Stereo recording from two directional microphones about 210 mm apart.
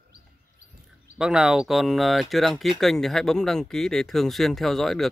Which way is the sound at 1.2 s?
5° right (ahead or behind).